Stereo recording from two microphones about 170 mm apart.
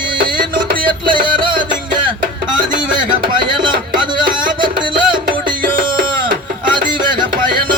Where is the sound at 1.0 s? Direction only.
30° right (ahead or behind).